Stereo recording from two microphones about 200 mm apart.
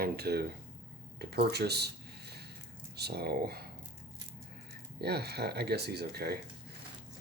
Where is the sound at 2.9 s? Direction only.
55° right (ahead or behind).